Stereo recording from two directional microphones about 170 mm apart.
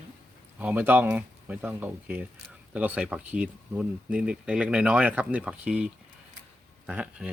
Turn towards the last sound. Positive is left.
turn(degrees=-10)  # may be behind; listen again after turning